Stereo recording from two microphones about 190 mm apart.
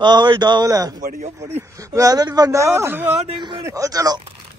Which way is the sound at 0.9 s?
40° right (ahead or behind).